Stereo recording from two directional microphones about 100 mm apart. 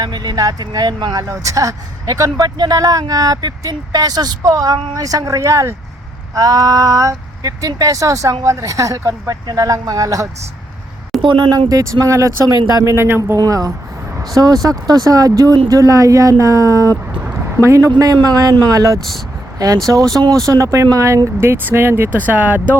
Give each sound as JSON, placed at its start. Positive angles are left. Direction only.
{"t": 0.0, "sound": "speech", "side_deg": -45}
{"t": 11.2, "sound": "speech", "side_deg": -55}
{"t": 11.7, "sound": "speech", "side_deg": -35}
{"t": 13.4, "sound": "speech", "side_deg": -40}
{"t": 15.8, "sound": "speech", "side_deg": -35}
{"t": 17.3, "sound": "a sound", "side_deg": -30}
{"t": 17.9, "sound": "speech", "side_deg": -40}
{"t": 21.4, "sound": "speech", "side_deg": -20}